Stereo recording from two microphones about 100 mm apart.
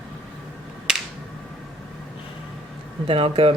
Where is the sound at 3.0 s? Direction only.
70° right (ahead or behind).